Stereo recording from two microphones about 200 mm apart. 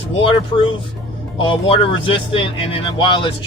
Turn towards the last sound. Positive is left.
turn(degrees=25)  # may be behind; listen again after turning